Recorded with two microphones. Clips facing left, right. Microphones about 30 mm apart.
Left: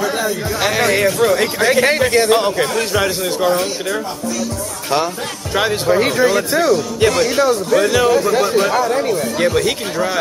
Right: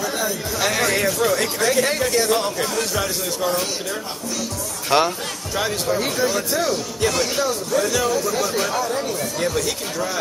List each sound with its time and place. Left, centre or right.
0.0 s speech: left
4.9 s speech: centre
5.5 s speech: left
7.1 s speech: left